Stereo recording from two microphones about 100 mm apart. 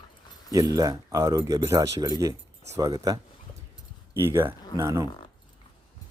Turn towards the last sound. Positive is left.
turn(degrees=-30)  # may be behind; listen again after turning